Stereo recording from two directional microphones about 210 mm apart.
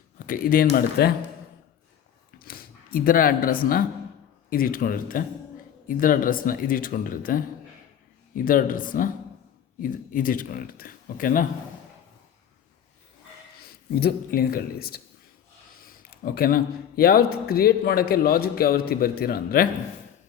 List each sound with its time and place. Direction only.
0.3 s speech: 45° left (ahead or behind)
2.4 s speech: 45° left (ahead or behind)
8.4 s speech: 40° left (ahead or behind)
13.6 s speech: 45° left (ahead or behind)